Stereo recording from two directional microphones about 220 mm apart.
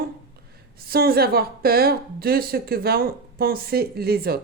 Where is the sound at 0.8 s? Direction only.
45° right (ahead or behind).